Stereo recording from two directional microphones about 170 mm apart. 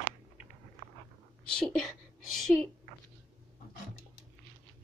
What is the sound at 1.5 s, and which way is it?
A woman's voice, 5° left (ahead or behind).